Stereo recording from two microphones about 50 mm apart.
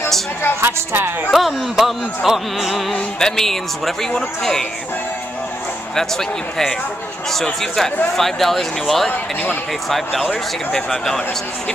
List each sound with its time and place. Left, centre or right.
0.6 s a woman's voice: right
1.3 s speech: centre
2.9 s speech: centre
5.9 s speech: centre
9.1 s speech: left
9.8 s speech: centre